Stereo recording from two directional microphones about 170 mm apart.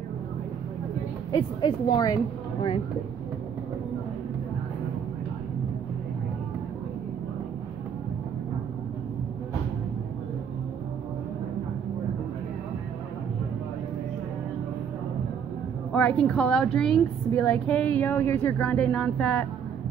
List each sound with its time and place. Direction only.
1.3 s a woman's voice: 25° left (ahead or behind)
15.9 s a woman's voice: 5° left (ahead or behind)